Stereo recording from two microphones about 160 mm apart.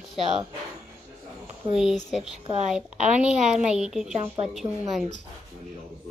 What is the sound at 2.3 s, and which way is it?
Speech, 40° right (ahead or behind).